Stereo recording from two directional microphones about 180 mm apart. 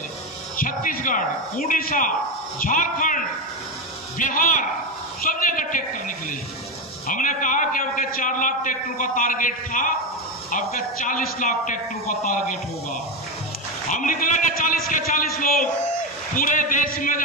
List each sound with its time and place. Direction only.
0.6 s a man's voice: 50° left (ahead or behind)
13.8 s a man's voice: 45° left (ahead or behind)